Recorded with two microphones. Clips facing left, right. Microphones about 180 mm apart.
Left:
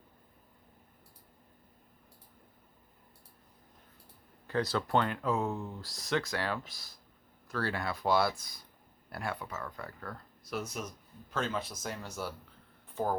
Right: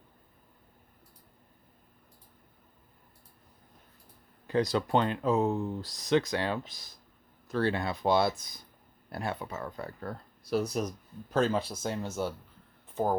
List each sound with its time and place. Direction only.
4.4 s speech: 15° right (ahead or behind)